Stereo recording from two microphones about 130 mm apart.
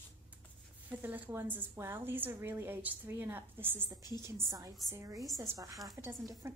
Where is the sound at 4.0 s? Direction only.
30° left (ahead or behind).